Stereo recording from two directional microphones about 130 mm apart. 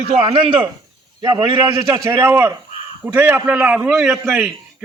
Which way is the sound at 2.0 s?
20° right (ahead or behind).